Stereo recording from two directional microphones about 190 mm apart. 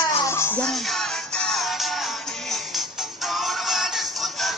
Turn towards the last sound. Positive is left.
turn(degrees=0)  # may be behind; listen again after turning